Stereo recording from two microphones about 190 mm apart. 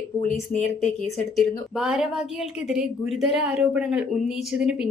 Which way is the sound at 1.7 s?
5° right (ahead or behind).